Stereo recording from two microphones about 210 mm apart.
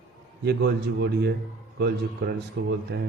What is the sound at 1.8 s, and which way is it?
A man's voice, 50° right (ahead or behind).